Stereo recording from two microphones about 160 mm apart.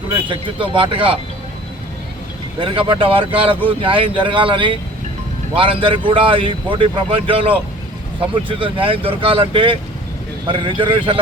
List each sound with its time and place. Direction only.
0.3 s speech: 30° right (ahead or behind)
2.6 s speech: 30° right (ahead or behind)